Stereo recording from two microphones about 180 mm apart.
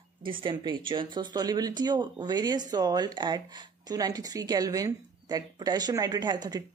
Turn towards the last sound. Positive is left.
turn(degrees=-20)  # may be behind; listen again after turning